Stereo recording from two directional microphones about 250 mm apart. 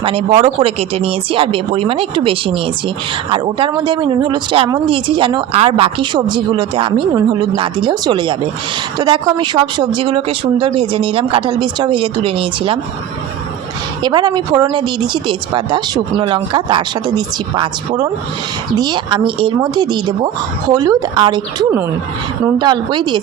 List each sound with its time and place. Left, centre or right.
0.0 s speech: right
14.0 s speech: centre